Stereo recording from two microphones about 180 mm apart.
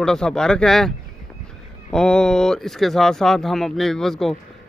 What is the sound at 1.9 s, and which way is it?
Speech, 5° left (ahead or behind).